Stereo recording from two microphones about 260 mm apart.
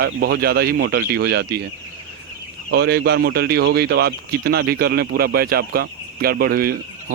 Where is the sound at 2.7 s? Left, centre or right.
Right.